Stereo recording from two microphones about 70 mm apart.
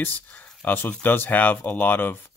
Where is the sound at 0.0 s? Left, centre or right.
Left.